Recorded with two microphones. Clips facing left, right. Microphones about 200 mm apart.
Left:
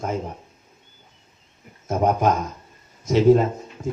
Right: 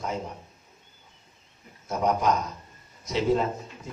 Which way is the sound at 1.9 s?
45° left (ahead or behind).